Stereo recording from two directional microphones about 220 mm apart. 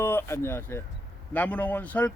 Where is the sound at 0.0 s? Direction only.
10° left (ahead or behind).